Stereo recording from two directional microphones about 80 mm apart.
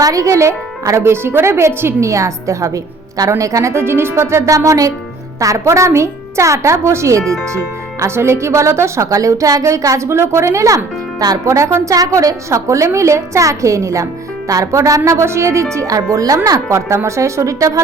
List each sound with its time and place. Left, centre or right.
0.0 s speech: right